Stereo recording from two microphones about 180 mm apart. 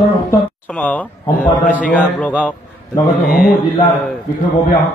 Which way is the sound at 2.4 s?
10° left (ahead or behind).